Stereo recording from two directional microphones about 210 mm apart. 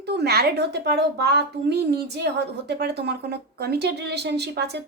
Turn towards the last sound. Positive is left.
turn(degrees=-50)  # may be behind; listen again after turning